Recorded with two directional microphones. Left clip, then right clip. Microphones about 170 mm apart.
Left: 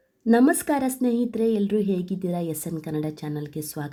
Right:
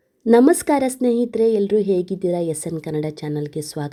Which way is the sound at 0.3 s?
35° right (ahead or behind).